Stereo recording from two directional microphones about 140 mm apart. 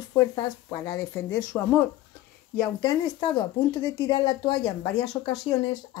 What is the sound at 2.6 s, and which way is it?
Speech, 25° left (ahead or behind).